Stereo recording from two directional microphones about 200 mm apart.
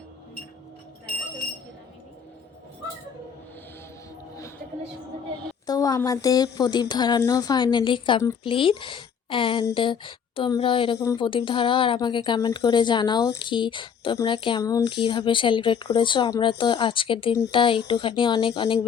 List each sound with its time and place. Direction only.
5.6 s speech: 20° left (ahead or behind)